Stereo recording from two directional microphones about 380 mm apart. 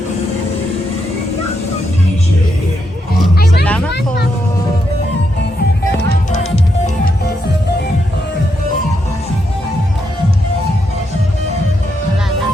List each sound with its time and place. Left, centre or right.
3.3 s music: left